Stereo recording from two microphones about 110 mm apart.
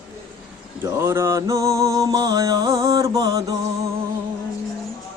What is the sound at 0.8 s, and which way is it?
Mantra, 25° right (ahead or behind).